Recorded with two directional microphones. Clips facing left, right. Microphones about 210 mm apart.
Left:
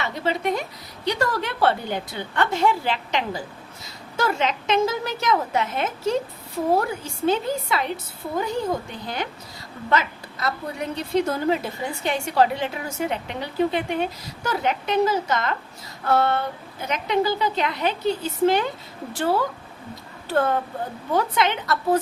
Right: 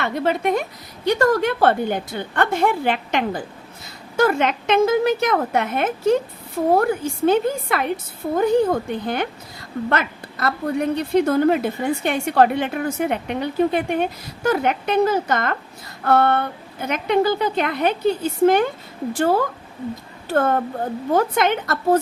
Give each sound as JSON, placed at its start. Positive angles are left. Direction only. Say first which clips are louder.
{"t": 0.0, "sound": "a woman's voice", "louder": "right 4 dB", "side_deg": -55}